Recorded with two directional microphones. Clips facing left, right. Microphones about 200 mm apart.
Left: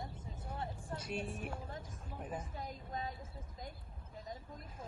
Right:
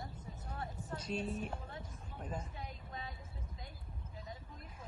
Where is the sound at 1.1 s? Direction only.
60° left (ahead or behind).